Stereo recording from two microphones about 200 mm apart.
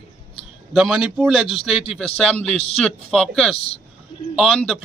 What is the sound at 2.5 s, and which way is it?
Speech, 30° left (ahead or behind).